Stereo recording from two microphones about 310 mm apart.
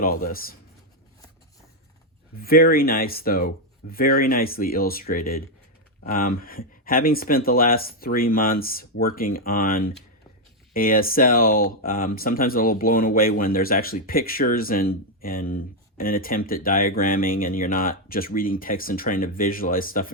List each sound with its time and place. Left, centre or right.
0.0 s speech: left
2.4 s speech: left